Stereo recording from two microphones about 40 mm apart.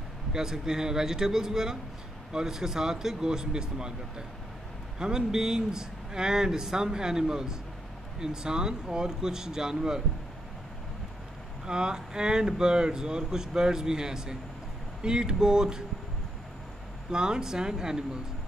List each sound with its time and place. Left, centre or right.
0.3 s speech: centre
4.9 s speech: centre
11.6 s speech: centre
17.1 s speech: centre